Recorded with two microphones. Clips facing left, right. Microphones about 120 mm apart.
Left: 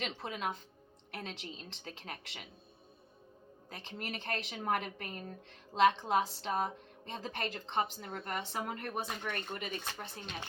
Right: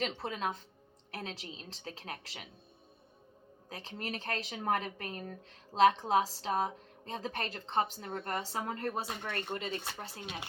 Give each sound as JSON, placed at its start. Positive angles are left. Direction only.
{"t": 0.0, "sound": "a woman's voice", "side_deg": -35}
{"t": 3.7, "sound": "a woman's voice", "side_deg": -30}
{"t": 9.8, "sound": "speech", "side_deg": -5}